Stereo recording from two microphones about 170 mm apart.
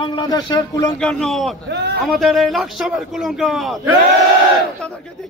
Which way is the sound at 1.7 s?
85° right.